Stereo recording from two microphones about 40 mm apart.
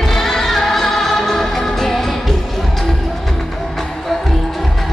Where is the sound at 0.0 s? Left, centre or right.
Centre.